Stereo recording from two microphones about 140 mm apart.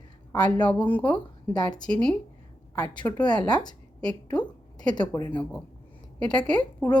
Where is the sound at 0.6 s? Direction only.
10° left (ahead or behind).